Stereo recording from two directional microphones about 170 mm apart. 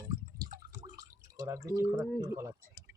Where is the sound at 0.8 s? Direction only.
20° right (ahead or behind).